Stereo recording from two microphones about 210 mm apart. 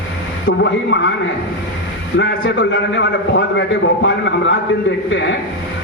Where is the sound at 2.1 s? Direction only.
60° left (ahead or behind).